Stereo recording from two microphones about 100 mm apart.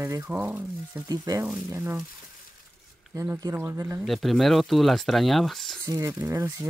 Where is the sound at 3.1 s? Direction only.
30° right (ahead or behind).